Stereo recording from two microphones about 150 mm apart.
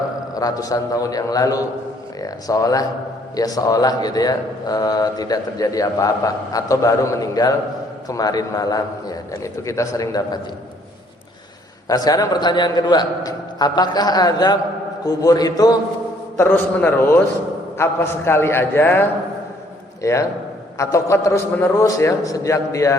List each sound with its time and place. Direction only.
0.3 s a man's voice: 25° left (ahead or behind)
11.9 s a man's voice: 25° left (ahead or behind)
16.4 s a man's voice: 10° left (ahead or behind)